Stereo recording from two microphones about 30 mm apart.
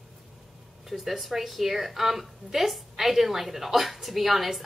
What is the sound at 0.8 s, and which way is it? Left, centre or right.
A woman's voice, centre.